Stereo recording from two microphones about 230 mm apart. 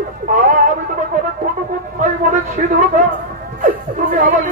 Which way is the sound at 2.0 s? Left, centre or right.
Right.